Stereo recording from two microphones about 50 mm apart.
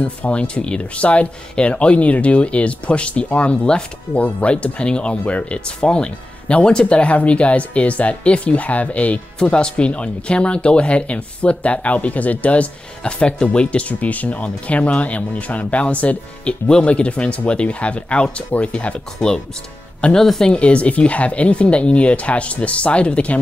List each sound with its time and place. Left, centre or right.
0.0 s speech: left
5.8 s speech: centre
19.1 s speech: centre
20.5 s speech: left